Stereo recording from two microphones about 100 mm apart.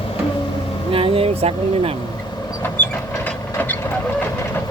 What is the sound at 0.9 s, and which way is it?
Speech, 65° right (ahead or behind).